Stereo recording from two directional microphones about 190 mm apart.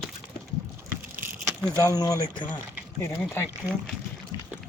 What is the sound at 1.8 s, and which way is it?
Speech, 20° left (ahead or behind).